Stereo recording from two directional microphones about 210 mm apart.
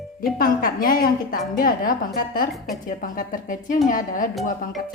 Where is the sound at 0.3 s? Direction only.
45° left (ahead or behind).